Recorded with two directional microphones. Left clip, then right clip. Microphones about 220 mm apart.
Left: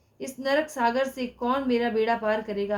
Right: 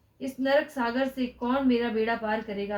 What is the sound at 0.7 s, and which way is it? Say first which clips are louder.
A woman's voice: left 4 dB; 45° left (ahead or behind).